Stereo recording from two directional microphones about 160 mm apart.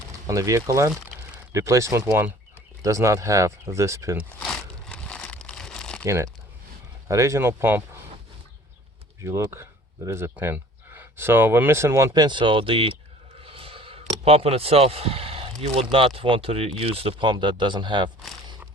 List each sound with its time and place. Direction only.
0.3 s speech: 20° right (ahead or behind)
4.4 s crumpling: 5° left (ahead or behind)
6.1 s speech: 15° right (ahead or behind)
9.2 s speech: 15° right (ahead or behind)